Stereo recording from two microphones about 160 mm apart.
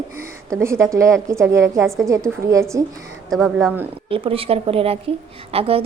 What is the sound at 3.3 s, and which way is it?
Speech, 5° right (ahead or behind).